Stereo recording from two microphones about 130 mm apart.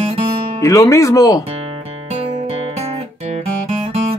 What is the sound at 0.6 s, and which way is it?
Speech, 25° left (ahead or behind).